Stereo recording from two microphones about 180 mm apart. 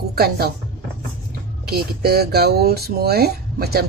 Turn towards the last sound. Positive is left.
turn(degrees=-60)  # may be behind; listen again after turning